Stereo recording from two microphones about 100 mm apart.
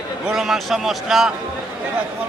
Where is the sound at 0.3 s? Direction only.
5° right (ahead or behind).